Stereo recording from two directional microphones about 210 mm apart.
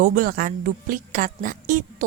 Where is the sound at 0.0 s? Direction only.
40° right (ahead or behind).